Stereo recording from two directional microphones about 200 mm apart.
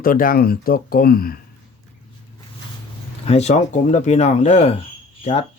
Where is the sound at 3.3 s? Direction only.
35° left (ahead or behind).